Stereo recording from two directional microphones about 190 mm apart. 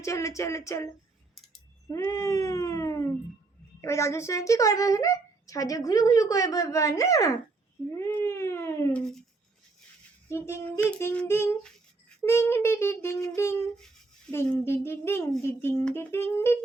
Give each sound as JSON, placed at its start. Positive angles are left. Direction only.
{"t": 0.0, "sound": "speech", "side_deg": 15}
{"t": 1.9, "sound": "cat", "side_deg": 15}
{"t": 3.8, "sound": "speech", "side_deg": 15}
{"t": 10.2, "sound": "speech", "side_deg": 15}